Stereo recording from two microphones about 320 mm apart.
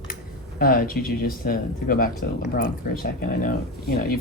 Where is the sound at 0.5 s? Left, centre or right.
Left.